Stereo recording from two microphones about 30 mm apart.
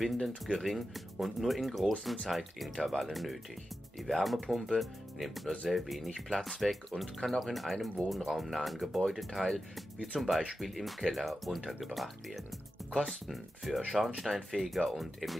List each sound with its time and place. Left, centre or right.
0.0 s speech: centre
6.0 s speech: centre